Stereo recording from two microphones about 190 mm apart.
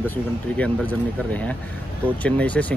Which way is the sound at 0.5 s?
5° left (ahead or behind).